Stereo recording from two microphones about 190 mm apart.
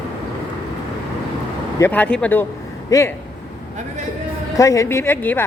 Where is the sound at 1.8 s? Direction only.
10° left (ahead or behind).